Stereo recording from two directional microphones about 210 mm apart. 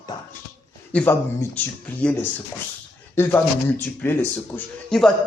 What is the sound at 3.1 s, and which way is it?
A man's voice, 10° left (ahead or behind).